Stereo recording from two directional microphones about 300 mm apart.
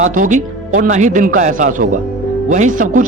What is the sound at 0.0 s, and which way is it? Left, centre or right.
Speech, right.